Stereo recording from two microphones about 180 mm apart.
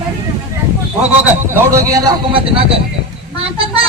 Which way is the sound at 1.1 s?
10° right (ahead or behind).